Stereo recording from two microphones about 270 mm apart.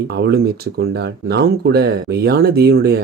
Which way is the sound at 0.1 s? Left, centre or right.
Right.